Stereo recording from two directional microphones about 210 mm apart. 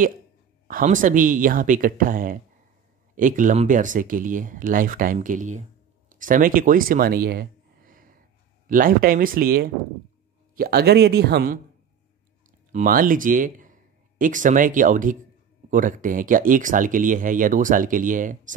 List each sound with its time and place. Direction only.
0.7 s a man's voice: 40° right (ahead or behind)